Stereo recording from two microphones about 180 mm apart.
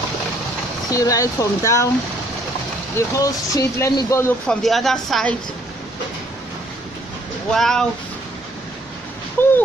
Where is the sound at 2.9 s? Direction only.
15° left (ahead or behind).